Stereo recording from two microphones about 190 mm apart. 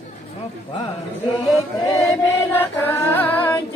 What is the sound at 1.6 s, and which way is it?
Chant, 15° left (ahead or behind).